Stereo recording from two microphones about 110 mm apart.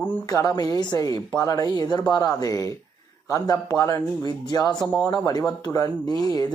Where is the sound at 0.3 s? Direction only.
35° left (ahead or behind).